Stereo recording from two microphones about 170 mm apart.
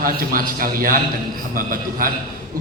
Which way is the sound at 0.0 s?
60° right (ahead or behind).